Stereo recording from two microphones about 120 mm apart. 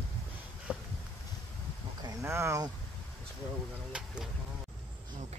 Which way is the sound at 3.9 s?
5° right (ahead or behind).